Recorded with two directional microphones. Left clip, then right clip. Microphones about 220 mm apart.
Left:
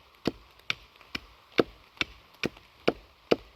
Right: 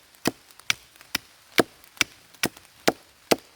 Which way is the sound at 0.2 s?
20° right (ahead or behind).